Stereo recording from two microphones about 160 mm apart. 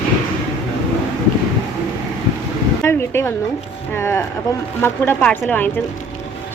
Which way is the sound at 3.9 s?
15° left (ahead or behind).